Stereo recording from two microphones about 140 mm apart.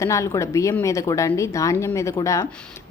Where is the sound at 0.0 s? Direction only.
20° left (ahead or behind).